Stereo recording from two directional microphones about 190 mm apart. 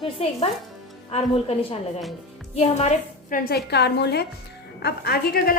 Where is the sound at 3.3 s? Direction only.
50° left (ahead or behind).